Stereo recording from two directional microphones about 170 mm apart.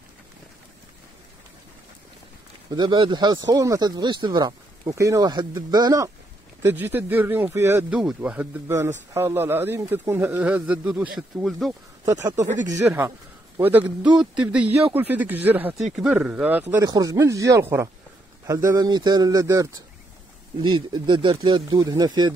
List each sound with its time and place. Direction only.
2.7 s speech: 25° right (ahead or behind)
6.6 s speech: 10° right (ahead or behind)
12.0 s speech: 20° right (ahead or behind)
16.8 s speech: 20° right (ahead or behind)